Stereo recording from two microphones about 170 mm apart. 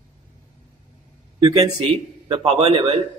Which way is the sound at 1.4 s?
35° right (ahead or behind).